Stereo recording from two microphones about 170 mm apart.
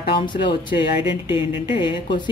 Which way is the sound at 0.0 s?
30° left (ahead or behind).